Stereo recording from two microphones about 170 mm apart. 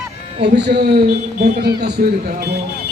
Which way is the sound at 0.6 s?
75° right (ahead or behind).